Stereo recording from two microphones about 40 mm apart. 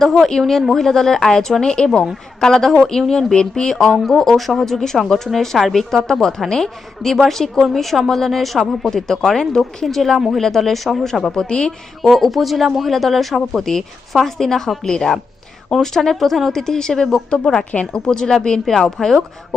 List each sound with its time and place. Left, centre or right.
0.0 s a woman's voice: centre
3.9 s speech: centre
8.8 s speech: centre
9.6 s speech: centre
11.3 s a woman's voice: centre
12.0 s speech: centre
14.3 s speech: centre